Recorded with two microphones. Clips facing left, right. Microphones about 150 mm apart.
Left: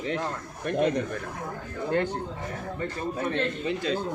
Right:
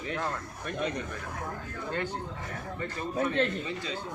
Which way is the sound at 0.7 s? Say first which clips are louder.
Left 8 dB; 45° left (ahead or behind).